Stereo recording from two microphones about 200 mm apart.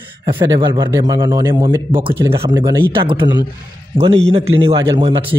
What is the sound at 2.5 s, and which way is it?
Speech, 15° right (ahead or behind).